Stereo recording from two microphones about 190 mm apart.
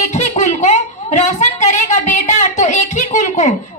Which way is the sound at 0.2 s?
40° left (ahead or behind).